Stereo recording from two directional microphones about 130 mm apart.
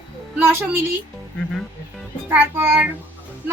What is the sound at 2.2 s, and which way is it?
Speech, 15° right (ahead or behind).